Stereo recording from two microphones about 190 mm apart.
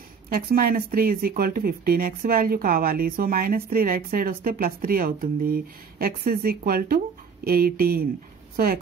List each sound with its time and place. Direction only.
0.3 s speech: 50° right (ahead or behind)